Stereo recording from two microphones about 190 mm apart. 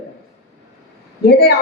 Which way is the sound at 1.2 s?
55° left (ahead or behind).